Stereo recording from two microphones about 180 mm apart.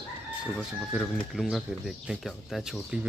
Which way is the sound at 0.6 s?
Centre (ahead or behind).